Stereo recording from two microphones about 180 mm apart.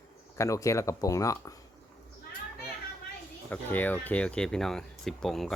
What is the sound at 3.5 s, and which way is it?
Speech, 10° left (ahead or behind).